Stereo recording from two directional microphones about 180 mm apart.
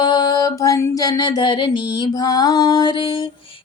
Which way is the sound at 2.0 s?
20° left (ahead or behind).